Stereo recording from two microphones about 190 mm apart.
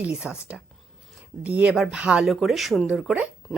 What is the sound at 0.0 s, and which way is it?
Speech, 5° right (ahead or behind).